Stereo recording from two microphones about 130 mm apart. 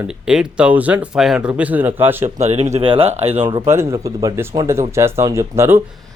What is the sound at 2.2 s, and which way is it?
Speech, 65° right (ahead or behind).